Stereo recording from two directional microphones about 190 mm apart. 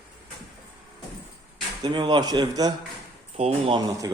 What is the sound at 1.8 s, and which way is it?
Speech, 25° right (ahead or behind).